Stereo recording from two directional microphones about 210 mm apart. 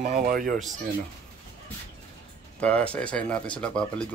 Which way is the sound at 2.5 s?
5° left (ahead or behind).